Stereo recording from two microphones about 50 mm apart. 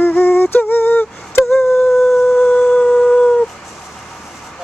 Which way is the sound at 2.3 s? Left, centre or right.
Left.